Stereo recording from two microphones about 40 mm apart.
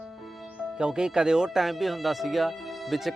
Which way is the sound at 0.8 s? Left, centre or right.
Centre.